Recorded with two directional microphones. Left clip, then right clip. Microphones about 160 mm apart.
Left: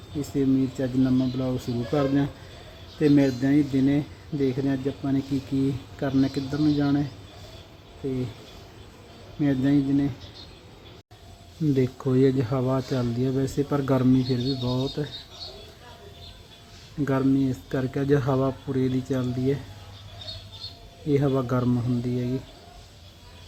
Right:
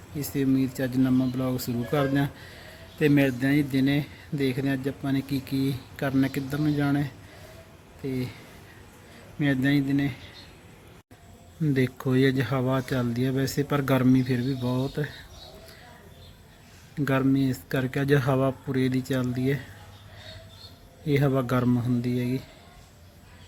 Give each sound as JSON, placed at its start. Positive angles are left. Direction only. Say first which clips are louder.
{"t": 0.2, "sound": "speech", "louder": "left 2 dB", "side_deg": -15}
{"t": 9.4, "sound": "speech", "louder": "left 1 dB", "side_deg": -10}
{"t": 11.7, "sound": "speech", "louder": "left 1 dB", "side_deg": 0}
{"t": 17.1, "sound": "speech", "louder": "left 1 dB", "side_deg": -20}
{"t": 21.1, "sound": "speech", "louder": "left 1 dB", "side_deg": -20}